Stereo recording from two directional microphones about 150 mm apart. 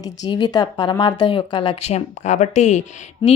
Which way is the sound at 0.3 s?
30° left (ahead or behind).